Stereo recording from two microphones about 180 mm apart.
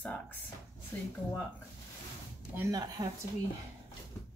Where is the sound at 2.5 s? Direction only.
20° right (ahead or behind).